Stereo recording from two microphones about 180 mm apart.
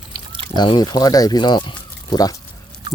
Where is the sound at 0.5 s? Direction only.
25° left (ahead or behind).